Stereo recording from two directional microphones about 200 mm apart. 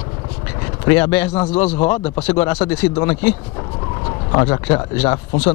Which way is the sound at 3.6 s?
25° left (ahead or behind).